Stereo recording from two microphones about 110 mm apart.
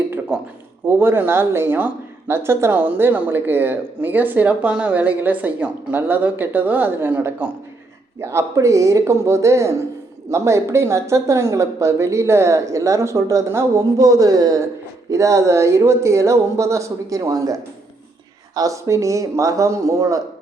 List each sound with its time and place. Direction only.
0.9 s speech: 20° right (ahead or behind)